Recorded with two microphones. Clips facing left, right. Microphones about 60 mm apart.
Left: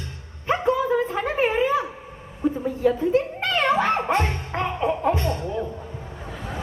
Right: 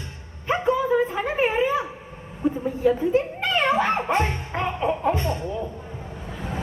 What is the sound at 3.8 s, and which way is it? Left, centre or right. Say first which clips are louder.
Music: even; centre.